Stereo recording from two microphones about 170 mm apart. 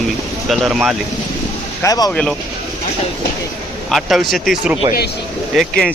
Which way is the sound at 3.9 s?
Centre (ahead or behind).